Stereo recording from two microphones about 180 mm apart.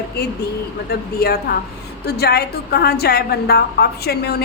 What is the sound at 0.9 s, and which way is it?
A woman's voice, 60° left (ahead or behind).